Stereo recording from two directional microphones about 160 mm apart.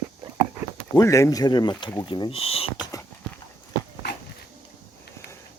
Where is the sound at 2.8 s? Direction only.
20° left (ahead or behind).